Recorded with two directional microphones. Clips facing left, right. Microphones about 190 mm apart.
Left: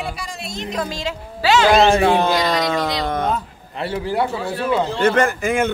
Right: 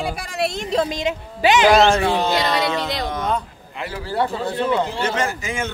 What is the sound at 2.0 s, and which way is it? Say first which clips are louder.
Speech: left 3 dB; 55° left (ahead or behind).